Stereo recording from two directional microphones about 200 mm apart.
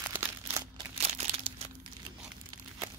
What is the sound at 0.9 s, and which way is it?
Crumpling, 30° right (ahead or behind).